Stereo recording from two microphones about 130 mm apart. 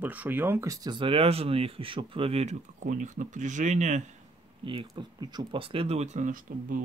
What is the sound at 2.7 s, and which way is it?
Speech, 75° right (ahead or behind).